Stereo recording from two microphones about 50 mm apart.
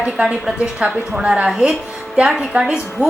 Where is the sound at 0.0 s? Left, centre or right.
Centre.